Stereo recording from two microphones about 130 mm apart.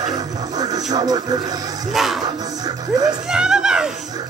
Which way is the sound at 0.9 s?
30° right (ahead or behind).